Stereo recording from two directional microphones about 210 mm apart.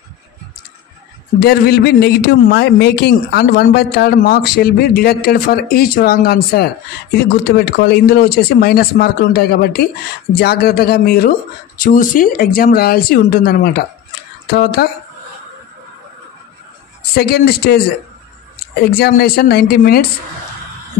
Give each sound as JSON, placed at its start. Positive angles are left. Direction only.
{"t": 1.4, "sound": "a man's voice", "side_deg": 50}
{"t": 17.1, "sound": "a man's voice", "side_deg": 50}
{"t": 18.9, "sound": "a man's voice", "side_deg": 45}